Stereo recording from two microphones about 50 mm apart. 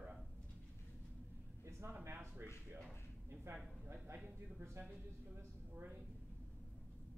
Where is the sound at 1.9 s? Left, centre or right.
Right.